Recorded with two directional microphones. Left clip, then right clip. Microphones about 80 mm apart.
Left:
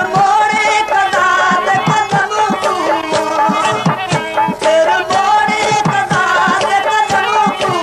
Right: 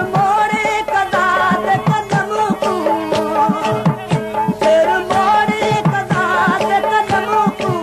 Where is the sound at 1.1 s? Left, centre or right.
Right.